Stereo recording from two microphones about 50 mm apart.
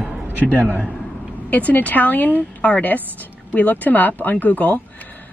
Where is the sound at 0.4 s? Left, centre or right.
Left.